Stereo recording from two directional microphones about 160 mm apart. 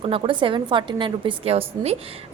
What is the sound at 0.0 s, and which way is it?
A woman's voice, 35° right (ahead or behind).